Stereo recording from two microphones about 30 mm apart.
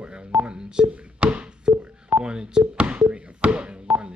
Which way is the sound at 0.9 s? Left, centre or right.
Right.